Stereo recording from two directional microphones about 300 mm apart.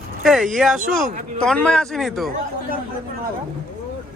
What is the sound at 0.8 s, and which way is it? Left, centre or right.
Speech, right.